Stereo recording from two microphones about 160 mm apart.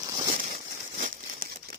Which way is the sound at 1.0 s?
70° right (ahead or behind).